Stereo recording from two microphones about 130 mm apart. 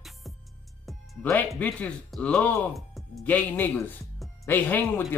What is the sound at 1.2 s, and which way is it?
A man's voice, 5° left (ahead or behind).